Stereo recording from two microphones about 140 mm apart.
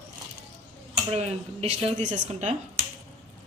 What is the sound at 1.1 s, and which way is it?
Speech, 50° right (ahead or behind).